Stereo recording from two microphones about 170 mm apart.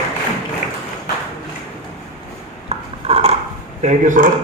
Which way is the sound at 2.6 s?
35° right (ahead or behind).